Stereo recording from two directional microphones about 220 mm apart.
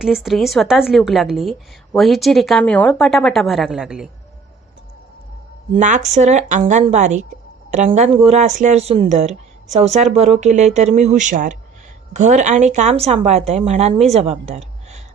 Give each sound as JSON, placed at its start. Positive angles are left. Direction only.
{"t": 0.0, "sound": "a woman's voice", "side_deg": 0}
{"t": 5.7, "sound": "speech", "side_deg": -35}